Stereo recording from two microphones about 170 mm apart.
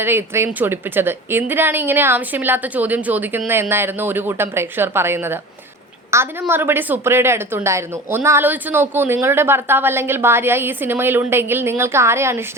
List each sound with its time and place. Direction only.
0.0 s speech: 15° right (ahead or behind)